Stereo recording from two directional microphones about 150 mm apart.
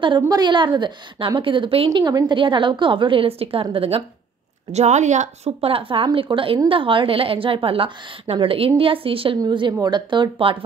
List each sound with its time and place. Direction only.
0.0 s a woman's voice: 30° right (ahead or behind)
4.7 s a woman's voice: 50° right (ahead or behind); by 10.6 s 35° right (ahead or behind)